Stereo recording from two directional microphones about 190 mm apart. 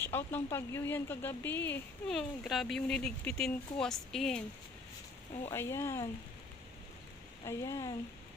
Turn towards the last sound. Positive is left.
turn(degrees=15)  # may be behind; listen again after turning